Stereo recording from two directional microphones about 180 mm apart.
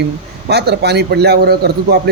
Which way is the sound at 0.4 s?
65° right (ahead or behind).